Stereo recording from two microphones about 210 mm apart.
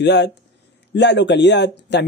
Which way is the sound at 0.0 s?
55° left (ahead or behind).